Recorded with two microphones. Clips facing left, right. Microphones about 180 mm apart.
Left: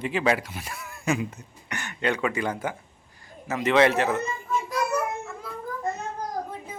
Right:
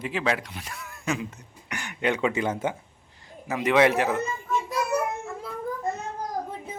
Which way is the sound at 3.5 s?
10° right (ahead or behind).